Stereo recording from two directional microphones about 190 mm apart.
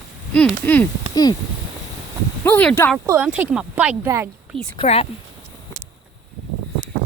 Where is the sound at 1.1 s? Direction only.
20° left (ahead or behind).